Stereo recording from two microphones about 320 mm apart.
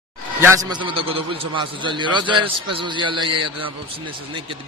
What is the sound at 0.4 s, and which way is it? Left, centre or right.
A man's voice, centre.